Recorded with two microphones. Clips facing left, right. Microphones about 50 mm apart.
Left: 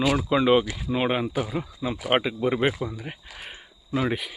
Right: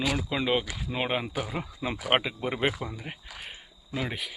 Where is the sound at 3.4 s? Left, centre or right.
Centre.